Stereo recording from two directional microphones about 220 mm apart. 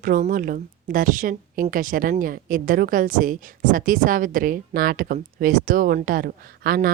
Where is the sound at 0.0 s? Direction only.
35° right (ahead or behind).